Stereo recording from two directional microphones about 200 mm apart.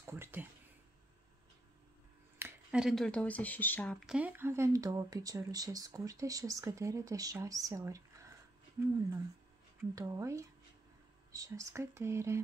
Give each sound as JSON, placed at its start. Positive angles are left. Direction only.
{"t": 0.0, "sound": "a sound", "side_deg": -10}
{"t": 2.3, "sound": "speech", "side_deg": -10}
{"t": 9.8, "sound": "speech", "side_deg": -15}